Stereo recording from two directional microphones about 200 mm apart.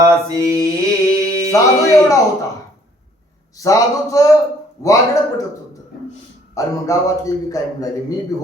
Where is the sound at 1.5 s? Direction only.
15° left (ahead or behind).